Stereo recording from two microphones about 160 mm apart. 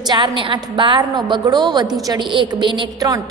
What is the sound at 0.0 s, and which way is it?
A woman's voice, 30° right (ahead or behind).